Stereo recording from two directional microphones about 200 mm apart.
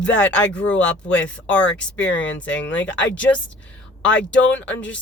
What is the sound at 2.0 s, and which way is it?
Speech, 65° left (ahead or behind).